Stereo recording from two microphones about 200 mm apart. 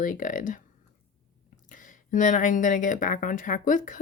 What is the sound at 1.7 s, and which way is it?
Speech, 40° left (ahead or behind).